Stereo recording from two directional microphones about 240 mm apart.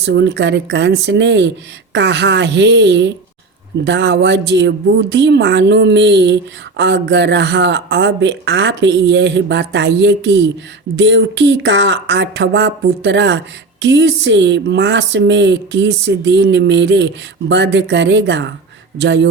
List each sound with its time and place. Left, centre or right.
0.0 s speech: right